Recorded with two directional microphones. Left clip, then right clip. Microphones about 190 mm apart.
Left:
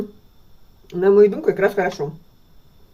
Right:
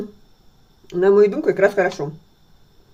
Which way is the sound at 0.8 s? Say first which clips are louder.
Left 1 dB; 15° right (ahead or behind).